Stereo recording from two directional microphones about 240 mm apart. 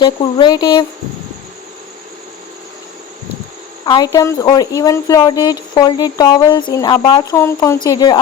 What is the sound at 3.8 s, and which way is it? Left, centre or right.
Speech, centre.